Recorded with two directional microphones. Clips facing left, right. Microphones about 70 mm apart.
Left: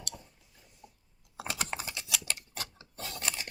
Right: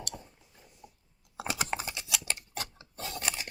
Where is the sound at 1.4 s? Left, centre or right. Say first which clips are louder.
Right 3 dB; centre.